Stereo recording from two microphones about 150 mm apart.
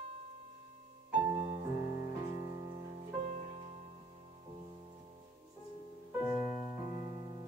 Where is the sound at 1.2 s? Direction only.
30° right (ahead or behind).